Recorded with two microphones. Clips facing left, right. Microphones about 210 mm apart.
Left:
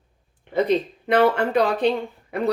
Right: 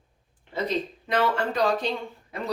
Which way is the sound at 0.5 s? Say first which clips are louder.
Left 7 dB; 60° left (ahead or behind).